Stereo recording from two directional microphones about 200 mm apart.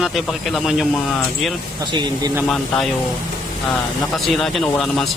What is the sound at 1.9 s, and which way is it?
Speech, 20° right (ahead or behind).